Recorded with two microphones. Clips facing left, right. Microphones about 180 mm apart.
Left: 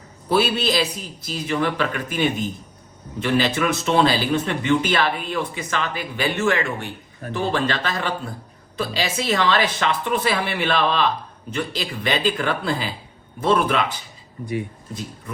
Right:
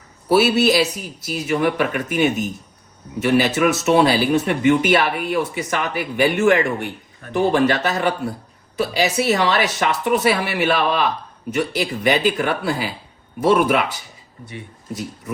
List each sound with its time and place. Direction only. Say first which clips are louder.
0.3 s speech: right 5 dB; 10° right (ahead or behind)